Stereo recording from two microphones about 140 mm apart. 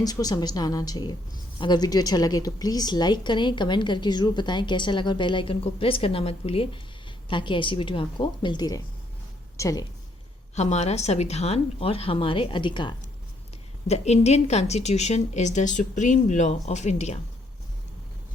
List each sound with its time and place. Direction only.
0.0 s a woman's voice: 25° left (ahead or behind)
10.5 s a woman's voice: 55° left (ahead or behind); by 13.0 s 35° left (ahead or behind)
13.8 s a woman's voice: 50° left (ahead or behind)